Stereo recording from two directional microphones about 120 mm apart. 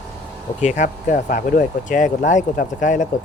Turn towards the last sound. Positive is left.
turn(degrees=90)